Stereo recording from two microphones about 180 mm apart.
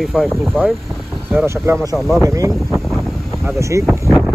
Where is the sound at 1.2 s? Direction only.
10° right (ahead or behind).